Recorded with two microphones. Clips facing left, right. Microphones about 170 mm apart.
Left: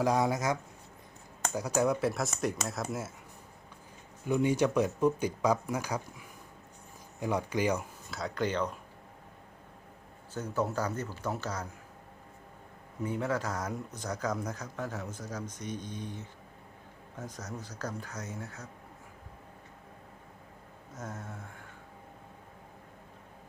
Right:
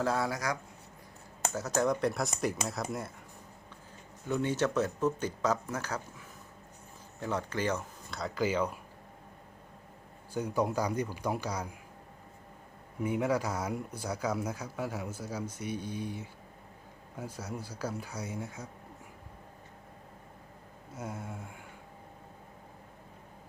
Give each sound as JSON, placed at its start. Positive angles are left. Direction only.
{"t": 0.0, "sound": "speech", "side_deg": 15}
{"t": 4.3, "sound": "speech", "side_deg": 15}
{"t": 10.3, "sound": "speech", "side_deg": -10}
{"t": 13.0, "sound": "speech", "side_deg": -10}
{"t": 20.9, "sound": "a sound", "side_deg": -10}